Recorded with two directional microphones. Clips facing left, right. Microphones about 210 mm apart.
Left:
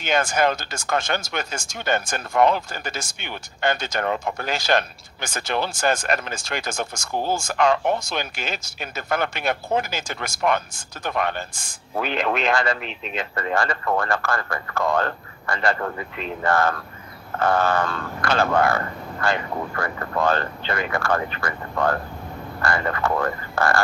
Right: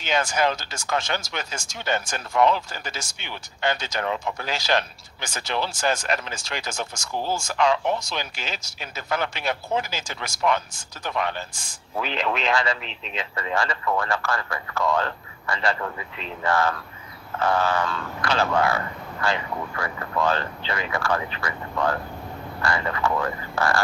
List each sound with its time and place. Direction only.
0.0 s speech: 50° left (ahead or behind)